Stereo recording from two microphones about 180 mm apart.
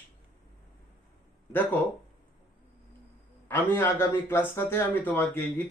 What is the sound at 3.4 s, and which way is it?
Speech, 15° left (ahead or behind).